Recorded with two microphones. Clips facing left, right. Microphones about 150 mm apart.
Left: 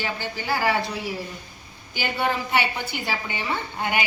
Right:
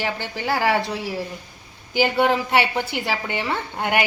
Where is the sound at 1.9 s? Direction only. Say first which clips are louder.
Right 7 dB; 90° right.